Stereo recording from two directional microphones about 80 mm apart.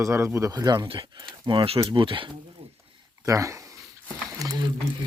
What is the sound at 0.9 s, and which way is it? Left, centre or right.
Speech, right.